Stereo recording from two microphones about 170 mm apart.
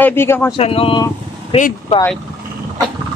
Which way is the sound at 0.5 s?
35° left (ahead or behind).